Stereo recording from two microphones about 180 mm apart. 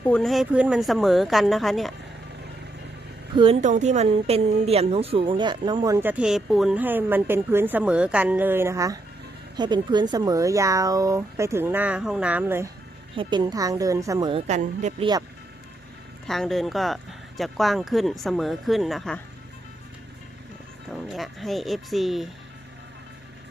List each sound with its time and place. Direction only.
0.0 s speech: 5° left (ahead or behind)
3.3 s a woman's voice: 30° right (ahead or behind)
3.6 s a woman's voice: 40° right (ahead or behind); by 12.7 s 15° right (ahead or behind)
13.1 s a woman's voice: 25° right (ahead or behind)
14.3 s a woman's voice: 40° right (ahead or behind)
16.2 s speech: centre (ahead or behind)
21.1 s speech: centre (ahead or behind)